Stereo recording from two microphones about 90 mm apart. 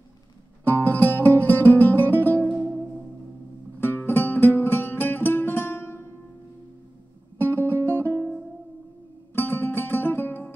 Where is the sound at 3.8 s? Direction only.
25° left (ahead or behind).